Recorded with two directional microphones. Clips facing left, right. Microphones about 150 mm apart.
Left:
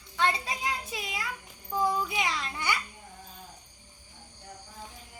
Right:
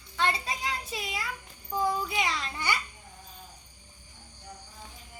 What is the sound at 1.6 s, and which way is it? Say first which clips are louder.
Child singing: even; centre (ahead or behind).